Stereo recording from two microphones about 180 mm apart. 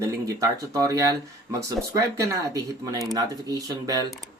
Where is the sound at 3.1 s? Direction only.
20° right (ahead or behind).